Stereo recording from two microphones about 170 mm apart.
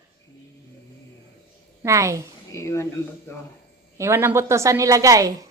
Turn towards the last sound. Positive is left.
turn(degrees=-20)  # may be behind; listen again after turning